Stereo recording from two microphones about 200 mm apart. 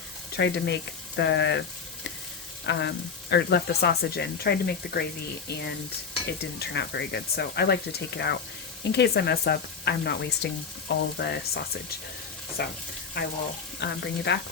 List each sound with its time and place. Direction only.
0.3 s speech: 60° left (ahead or behind)
2.6 s speech: 60° left (ahead or behind)
12.6 s stir: 50° left (ahead or behind)
13.7 s speech: 55° left (ahead or behind)